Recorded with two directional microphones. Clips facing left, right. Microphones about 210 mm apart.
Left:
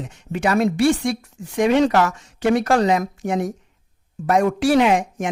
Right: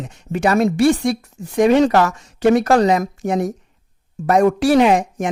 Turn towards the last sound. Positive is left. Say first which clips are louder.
# right 3 dB
turn(degrees=-40)  # may be behind; listen again after turning